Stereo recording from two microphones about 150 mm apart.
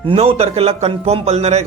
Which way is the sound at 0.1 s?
40° right (ahead or behind).